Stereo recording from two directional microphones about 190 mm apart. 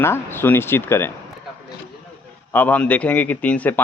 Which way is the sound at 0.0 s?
10° left (ahead or behind).